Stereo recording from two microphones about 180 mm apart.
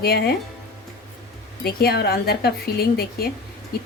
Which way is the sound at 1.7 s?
60° left (ahead or behind).